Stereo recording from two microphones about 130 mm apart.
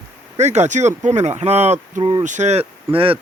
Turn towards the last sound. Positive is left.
turn(degrees=-45)  # may be behind; listen again after turning